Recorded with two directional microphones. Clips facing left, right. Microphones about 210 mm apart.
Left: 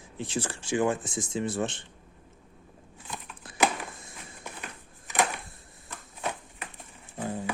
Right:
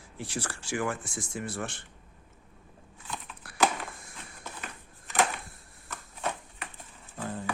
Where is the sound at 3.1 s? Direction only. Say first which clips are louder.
Even; 20° left (ahead or behind).